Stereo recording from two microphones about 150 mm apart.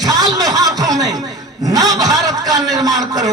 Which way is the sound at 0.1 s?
25° right (ahead or behind).